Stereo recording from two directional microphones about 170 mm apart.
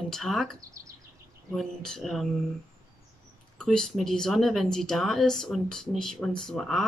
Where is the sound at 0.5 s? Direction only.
20° right (ahead or behind).